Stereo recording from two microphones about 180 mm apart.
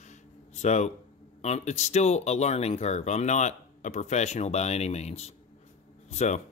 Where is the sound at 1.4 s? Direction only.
40° left (ahead or behind).